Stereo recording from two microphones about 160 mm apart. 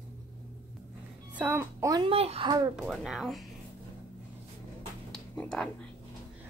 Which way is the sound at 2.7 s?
Centre (ahead or behind).